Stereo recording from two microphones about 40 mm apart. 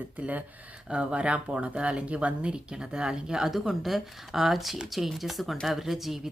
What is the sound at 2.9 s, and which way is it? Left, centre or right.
Speech, centre.